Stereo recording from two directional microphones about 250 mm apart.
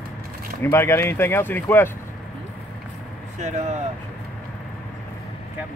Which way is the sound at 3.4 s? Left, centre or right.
Right.